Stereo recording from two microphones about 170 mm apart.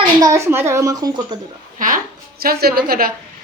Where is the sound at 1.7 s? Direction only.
55° right (ahead or behind).